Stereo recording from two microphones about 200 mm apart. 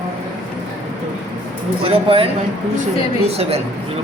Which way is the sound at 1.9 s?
25° right (ahead or behind).